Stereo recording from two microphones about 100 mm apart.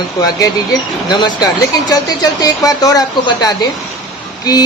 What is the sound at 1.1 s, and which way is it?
A woman's voice, 45° left (ahead or behind).